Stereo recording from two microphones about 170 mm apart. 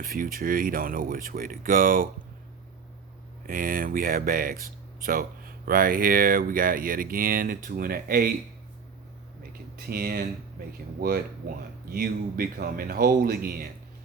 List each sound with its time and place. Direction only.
0.0 s speech: 55° right (ahead or behind)
3.4 s speech: 55° right (ahead or behind)
9.7 s speech: 60° right (ahead or behind)